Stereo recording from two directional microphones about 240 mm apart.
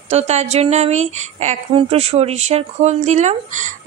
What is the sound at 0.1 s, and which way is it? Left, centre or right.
Speech, right.